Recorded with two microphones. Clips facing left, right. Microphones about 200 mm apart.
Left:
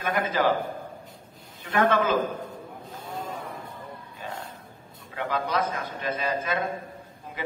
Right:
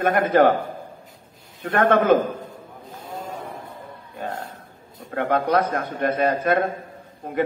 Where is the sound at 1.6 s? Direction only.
55° right (ahead or behind).